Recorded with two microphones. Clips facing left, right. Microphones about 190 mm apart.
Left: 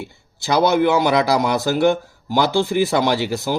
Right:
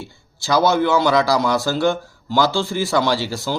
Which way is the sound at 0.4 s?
20° left (ahead or behind).